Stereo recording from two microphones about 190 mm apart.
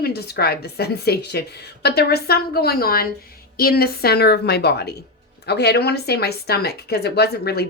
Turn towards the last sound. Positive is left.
turn(degrees=55)  # may be behind; listen again after turning